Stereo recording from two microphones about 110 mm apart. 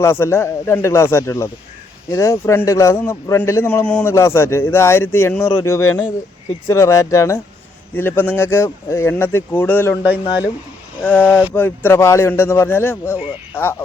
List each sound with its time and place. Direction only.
0.0 s a man's voice: 25° left (ahead or behind)
11.0 s a man's voice: 15° left (ahead or behind)